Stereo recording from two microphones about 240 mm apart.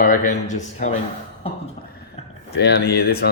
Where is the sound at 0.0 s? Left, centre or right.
Left.